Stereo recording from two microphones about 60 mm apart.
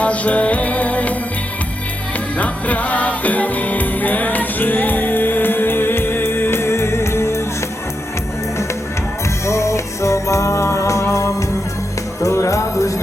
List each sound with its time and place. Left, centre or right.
0.0 s music: left
2.4 s music: left
9.5 s music: left